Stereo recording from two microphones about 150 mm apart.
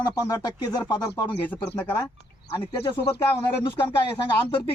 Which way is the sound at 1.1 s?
15° left (ahead or behind).